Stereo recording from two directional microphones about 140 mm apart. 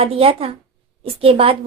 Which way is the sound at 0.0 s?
40° right (ahead or behind).